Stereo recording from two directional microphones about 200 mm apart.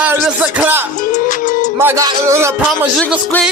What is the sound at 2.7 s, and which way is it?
Speech, centre (ahead or behind).